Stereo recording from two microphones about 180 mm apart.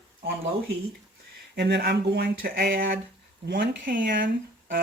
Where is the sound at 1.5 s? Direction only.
65° right (ahead or behind).